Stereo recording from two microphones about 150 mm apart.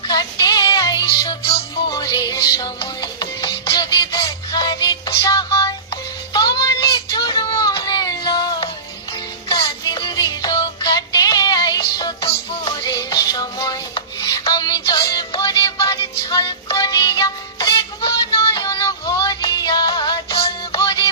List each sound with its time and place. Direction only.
0.0 s music: 30° left (ahead or behind)